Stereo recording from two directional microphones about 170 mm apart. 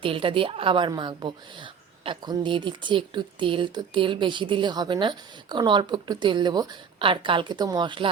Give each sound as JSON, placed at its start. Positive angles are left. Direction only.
{"t": 0.0, "sound": "a woman's voice", "side_deg": -30}